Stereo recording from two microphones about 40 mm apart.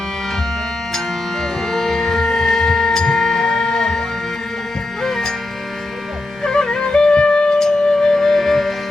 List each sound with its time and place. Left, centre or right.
0.9 s music: centre
5.0 s music: centre
6.4 s music: centre